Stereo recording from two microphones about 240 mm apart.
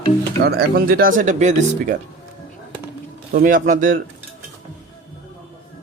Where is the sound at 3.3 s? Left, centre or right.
Right.